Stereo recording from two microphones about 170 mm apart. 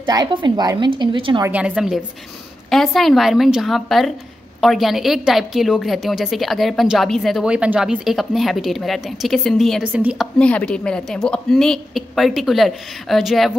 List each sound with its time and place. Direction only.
0.0 s a woman's voice: 25° right (ahead or behind)
1.4 s a woman's voice: 5° right (ahead or behind)
10.4 s a woman's voice: 5° left (ahead or behind)